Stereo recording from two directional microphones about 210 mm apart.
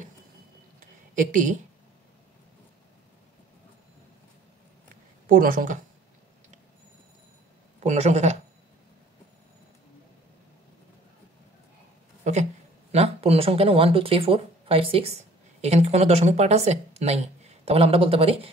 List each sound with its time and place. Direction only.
0.7 s a sound: 40° right (ahead or behind)
5.2 s speech: 40° right (ahead or behind)
7.8 s a woman's voice: 35° right (ahead or behind)
12.9 s a woman's voice: 30° right (ahead or behind)